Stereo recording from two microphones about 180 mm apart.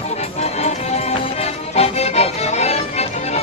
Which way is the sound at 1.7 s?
35° left (ahead or behind).